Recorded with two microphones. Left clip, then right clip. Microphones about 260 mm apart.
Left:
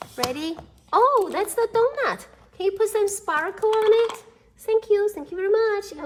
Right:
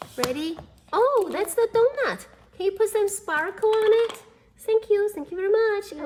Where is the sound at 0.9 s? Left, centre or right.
Centre.